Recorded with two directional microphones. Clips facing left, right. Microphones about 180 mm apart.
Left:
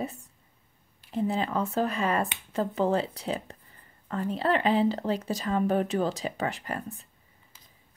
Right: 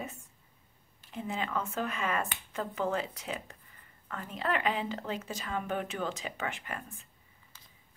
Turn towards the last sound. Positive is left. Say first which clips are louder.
# left 7 dB
turn(degrees=35)  # may be behind; listen again after turning